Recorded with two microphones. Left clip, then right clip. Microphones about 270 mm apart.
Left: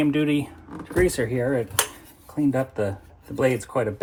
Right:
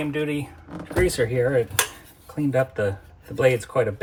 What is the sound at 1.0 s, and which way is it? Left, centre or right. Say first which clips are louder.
Cutlery: right 1 dB; centre.